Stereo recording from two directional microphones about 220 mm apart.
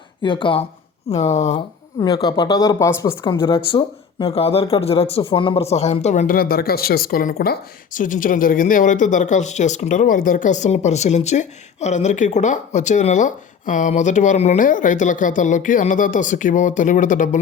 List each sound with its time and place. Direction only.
0.2 s speech: 20° left (ahead or behind)
2.0 s speech: 20° left (ahead or behind); by 17.4 s 35° left (ahead or behind)